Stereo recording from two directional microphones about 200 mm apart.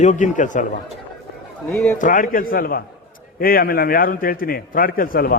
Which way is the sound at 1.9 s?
40° left (ahead or behind).